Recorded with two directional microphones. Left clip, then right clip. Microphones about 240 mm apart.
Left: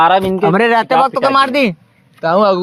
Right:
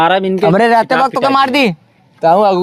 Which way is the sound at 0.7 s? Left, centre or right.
Right.